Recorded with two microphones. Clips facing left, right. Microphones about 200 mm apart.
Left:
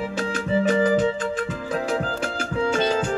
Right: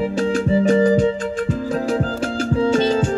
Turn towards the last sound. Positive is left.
turn(degrees=-30)  # may be behind; listen again after turning